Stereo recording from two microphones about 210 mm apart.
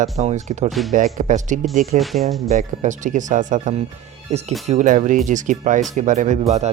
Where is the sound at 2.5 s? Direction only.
35° right (ahead or behind).